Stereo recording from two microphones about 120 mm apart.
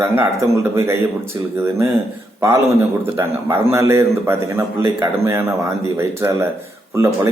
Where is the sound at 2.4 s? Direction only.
25° right (ahead or behind).